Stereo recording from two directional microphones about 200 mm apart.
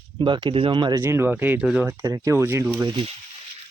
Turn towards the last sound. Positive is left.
turn(degrees=-25)  # may be behind; listen again after turning